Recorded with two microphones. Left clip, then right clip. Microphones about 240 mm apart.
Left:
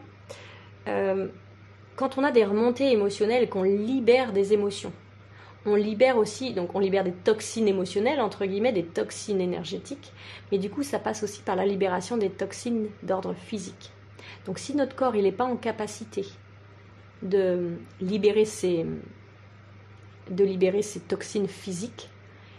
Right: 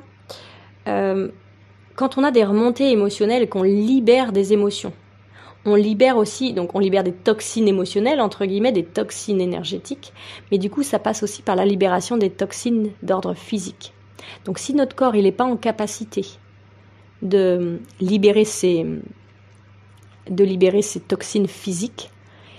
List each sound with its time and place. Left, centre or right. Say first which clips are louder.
0.8 s speech: right 6 dB; right
20.3 s speech: right 7 dB; right